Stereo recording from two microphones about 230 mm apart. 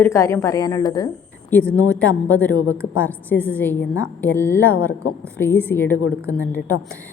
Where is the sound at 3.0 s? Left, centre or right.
Centre.